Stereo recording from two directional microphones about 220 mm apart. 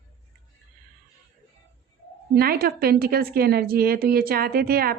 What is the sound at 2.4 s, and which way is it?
A woman's voice, 45° right (ahead or behind).